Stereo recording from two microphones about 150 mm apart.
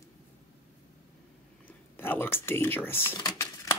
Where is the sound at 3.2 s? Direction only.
20° left (ahead or behind).